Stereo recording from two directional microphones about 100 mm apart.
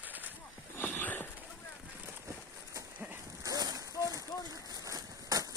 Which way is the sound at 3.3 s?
35° right (ahead or behind).